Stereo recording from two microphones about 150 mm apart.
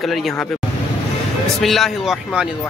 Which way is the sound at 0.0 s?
Centre (ahead or behind).